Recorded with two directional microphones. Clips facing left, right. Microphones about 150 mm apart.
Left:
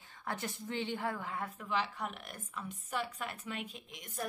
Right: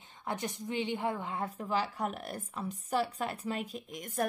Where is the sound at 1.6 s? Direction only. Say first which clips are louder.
Right 4 dB; 40° right (ahead or behind).